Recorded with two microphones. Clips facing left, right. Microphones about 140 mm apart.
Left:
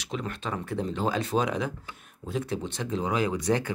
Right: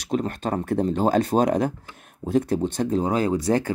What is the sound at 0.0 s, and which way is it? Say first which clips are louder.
Speech: right 8 dB; 45° right (ahead or behind).